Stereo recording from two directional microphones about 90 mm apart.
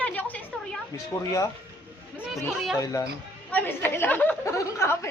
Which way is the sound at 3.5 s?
25° left (ahead or behind).